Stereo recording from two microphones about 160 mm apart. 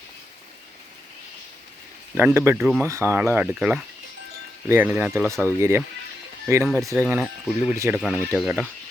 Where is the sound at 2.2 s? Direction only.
15° right (ahead or behind).